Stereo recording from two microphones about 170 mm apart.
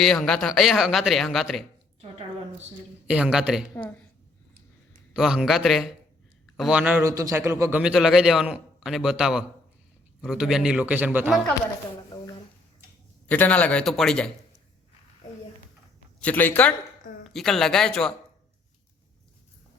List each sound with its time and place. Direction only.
0.0 s speech: centre (ahead or behind)
2.0 s a sound: 35° right (ahead or behind)
3.1 s speech: 5° right (ahead or behind)
3.8 s speech: 10° left (ahead or behind)
5.1 s a man's voice: centre (ahead or behind)
7.8 s speech: 5° right (ahead or behind)
13.2 s speech: 10° left (ahead or behind)
16.2 s speech: 10° left (ahead or behind)